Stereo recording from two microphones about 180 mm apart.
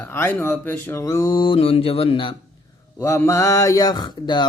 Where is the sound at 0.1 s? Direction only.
10° left (ahead or behind); by 2.3 s 30° left (ahead or behind).